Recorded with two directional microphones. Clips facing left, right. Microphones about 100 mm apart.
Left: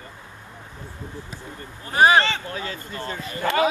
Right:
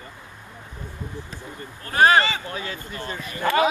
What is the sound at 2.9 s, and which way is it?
Speech, 20° left (ahead or behind).